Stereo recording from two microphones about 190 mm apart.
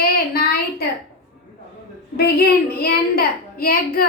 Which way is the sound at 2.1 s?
55° left (ahead or behind).